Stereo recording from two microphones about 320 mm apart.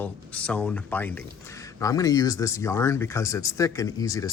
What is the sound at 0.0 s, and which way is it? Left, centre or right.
Speech, centre.